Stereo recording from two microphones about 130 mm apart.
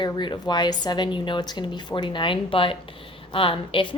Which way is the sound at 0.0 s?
35° left (ahead or behind).